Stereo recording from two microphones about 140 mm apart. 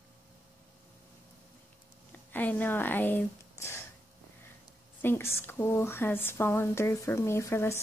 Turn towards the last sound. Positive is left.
turn(degrees=20)  # may be behind; listen again after turning